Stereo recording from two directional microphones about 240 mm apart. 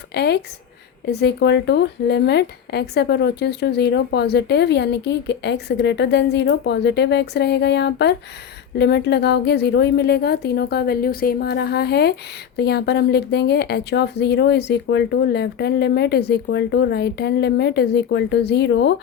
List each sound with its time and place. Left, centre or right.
0.1 s speech: left